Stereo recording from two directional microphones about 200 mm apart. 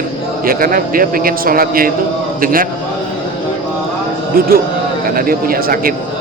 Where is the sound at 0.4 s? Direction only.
45° right (ahead or behind).